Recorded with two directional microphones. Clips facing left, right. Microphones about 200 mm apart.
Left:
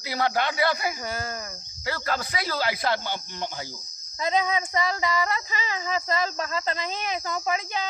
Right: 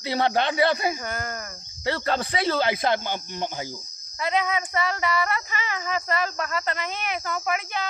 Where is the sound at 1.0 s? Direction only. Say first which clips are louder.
Even; 10° left (ahead or behind).